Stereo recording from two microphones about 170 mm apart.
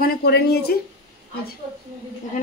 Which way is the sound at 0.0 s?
65° left (ahead or behind).